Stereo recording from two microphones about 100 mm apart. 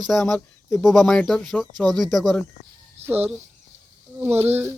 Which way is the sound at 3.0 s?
90° right.